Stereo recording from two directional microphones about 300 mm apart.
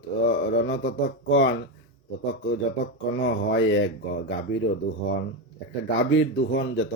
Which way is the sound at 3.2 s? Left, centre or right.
Left.